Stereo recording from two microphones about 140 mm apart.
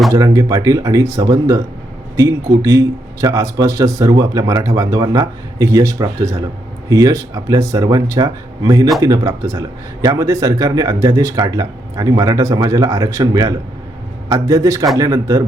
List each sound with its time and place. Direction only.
0.1 s speech: 25° right (ahead or behind)